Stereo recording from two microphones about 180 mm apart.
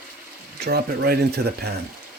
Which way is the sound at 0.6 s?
60° right (ahead or behind).